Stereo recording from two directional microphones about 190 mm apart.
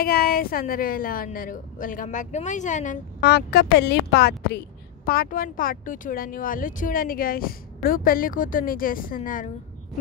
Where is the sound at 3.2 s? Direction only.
60° left (ahead or behind).